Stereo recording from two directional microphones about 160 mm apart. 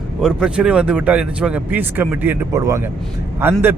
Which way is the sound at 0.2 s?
5° right (ahead or behind).